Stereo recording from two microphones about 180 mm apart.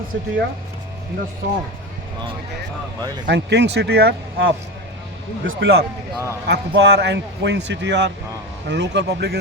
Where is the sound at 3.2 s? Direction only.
75° right (ahead or behind).